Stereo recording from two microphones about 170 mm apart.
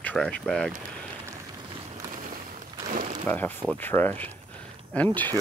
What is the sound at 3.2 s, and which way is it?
Speech, 10° left (ahead or behind).